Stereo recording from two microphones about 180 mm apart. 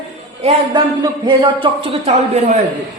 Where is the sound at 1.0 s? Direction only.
25° right (ahead or behind).